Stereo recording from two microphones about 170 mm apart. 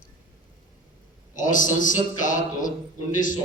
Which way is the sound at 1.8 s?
50° left (ahead or behind).